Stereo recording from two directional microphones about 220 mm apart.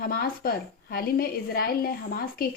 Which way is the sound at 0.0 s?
40° left (ahead or behind).